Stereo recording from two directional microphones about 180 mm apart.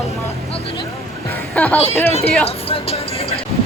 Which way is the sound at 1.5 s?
10° left (ahead or behind).